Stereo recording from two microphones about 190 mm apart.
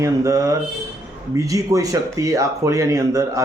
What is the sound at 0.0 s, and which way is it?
A man's voice, 15° right (ahead or behind).